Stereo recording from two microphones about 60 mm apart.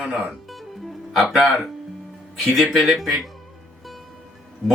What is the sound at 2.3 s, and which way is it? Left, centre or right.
Speech, centre.